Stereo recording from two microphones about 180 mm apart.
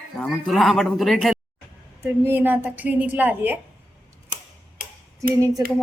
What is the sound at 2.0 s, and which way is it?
A woman's voice, 10° right (ahead or behind).